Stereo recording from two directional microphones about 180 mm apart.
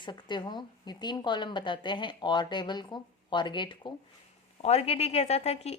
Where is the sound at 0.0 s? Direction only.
25° left (ahead or behind).